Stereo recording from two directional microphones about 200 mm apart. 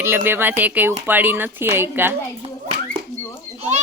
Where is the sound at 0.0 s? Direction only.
10° right (ahead or behind).